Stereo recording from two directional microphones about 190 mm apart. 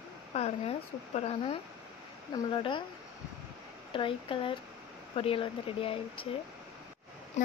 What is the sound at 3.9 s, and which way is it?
Speech, 25° left (ahead or behind).